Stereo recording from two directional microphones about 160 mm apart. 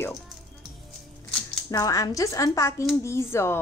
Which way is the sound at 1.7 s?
20° left (ahead or behind).